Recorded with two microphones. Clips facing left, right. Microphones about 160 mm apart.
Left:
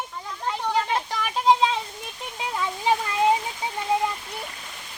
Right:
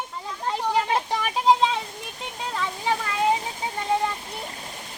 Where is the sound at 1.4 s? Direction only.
Centre (ahead or behind).